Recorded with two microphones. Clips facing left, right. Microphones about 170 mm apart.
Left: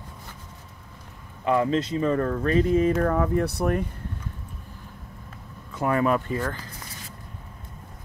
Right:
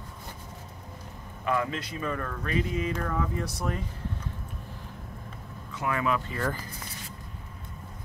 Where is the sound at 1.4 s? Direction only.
25° left (ahead or behind); by 3.9 s 60° left (ahead or behind).